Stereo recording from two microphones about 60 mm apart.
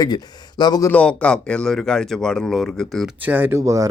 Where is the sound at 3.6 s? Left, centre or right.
Right.